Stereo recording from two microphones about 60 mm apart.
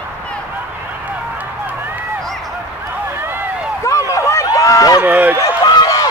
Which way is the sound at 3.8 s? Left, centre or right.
Left.